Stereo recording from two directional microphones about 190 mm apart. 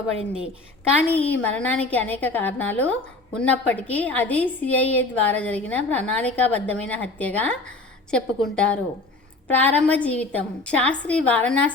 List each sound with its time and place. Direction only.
0.2 s a woman's voice: 30° left (ahead or behind)
1.1 s a woman's voice: 10° left (ahead or behind)